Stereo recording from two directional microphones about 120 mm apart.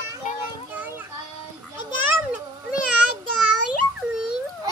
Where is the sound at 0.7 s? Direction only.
15° right (ahead or behind).